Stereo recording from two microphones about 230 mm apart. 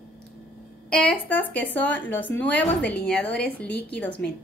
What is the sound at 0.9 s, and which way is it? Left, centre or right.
A woman's voice, centre.